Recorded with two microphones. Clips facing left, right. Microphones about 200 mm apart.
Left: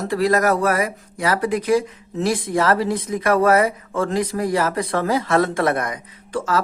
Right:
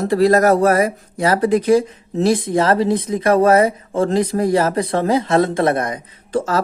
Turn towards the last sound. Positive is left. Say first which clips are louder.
# right 3 dB
turn(degrees=-30)  # may be behind; listen again after turning